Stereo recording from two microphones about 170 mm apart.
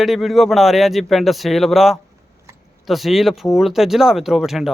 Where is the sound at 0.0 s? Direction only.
Centre (ahead or behind).